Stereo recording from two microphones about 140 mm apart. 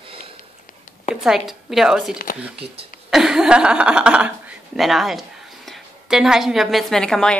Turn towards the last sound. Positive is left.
turn(degrees=5)  # may be behind; listen again after turning